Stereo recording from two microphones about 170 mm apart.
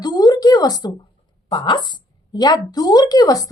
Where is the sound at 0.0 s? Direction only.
25° left (ahead or behind).